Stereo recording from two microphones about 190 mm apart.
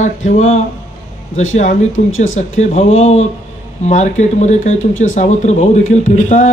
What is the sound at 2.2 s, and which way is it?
Speech, 35° left (ahead or behind).